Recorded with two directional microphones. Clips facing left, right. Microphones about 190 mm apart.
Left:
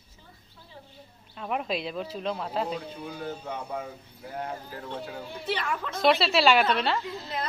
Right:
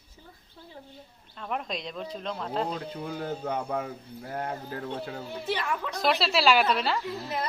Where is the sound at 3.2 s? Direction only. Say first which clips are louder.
Right 4 dB; 50° right (ahead or behind).